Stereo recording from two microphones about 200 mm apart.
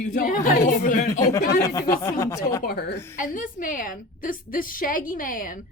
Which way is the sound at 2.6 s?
50° left (ahead or behind).